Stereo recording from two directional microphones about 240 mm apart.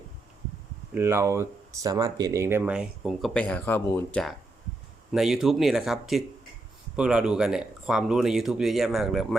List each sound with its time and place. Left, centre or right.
0.9 s speech: centre